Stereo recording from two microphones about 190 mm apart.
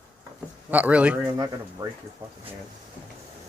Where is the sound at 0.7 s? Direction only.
10° right (ahead or behind).